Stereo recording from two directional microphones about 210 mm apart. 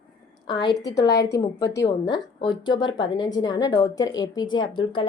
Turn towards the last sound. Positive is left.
turn(degrees=20)  # may be behind; listen again after turning